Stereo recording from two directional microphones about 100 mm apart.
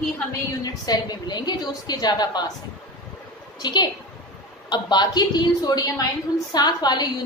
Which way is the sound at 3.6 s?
45° left (ahead or behind).